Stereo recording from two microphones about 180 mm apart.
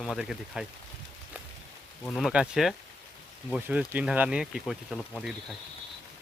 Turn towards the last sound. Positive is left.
turn(degrees=0)  # may be behind; listen again after turning